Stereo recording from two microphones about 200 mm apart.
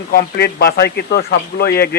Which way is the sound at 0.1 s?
50° left (ahead or behind).